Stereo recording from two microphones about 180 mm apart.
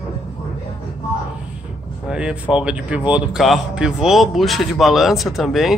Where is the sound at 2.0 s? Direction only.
5° right (ahead or behind).